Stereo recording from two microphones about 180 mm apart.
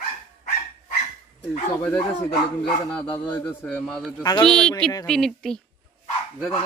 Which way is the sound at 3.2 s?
10° left (ahead or behind).